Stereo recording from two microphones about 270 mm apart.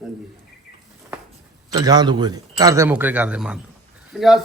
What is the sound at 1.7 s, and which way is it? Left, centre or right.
A man's voice, centre.